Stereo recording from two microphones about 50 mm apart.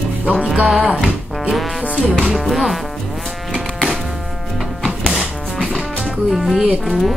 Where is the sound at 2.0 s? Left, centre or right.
Centre.